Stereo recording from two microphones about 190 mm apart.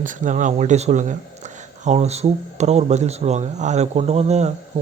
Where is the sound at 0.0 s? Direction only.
40° right (ahead or behind).